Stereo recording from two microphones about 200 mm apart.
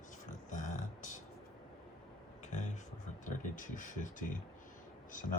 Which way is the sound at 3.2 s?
40° left (ahead or behind).